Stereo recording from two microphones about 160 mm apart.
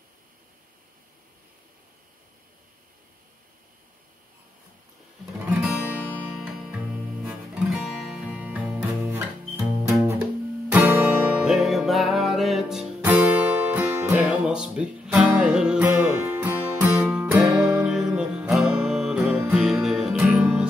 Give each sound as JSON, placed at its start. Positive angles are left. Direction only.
{"t": 5.5, "sound": "music", "side_deg": -5}
{"t": 10.7, "sound": "music", "side_deg": -15}